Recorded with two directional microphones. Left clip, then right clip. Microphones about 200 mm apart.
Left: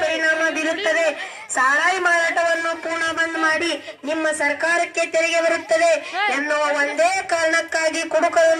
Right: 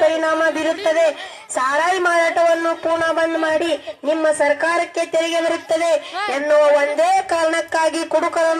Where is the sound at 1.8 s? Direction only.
35° right (ahead or behind).